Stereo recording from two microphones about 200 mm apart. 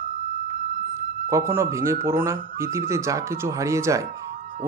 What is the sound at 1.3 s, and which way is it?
Speech, 15° right (ahead or behind).